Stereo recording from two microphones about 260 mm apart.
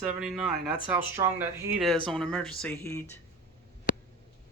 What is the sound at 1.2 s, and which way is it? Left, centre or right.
Speech, centre.